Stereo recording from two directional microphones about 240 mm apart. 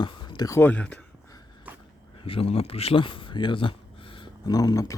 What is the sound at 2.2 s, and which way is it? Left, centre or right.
Speech, left.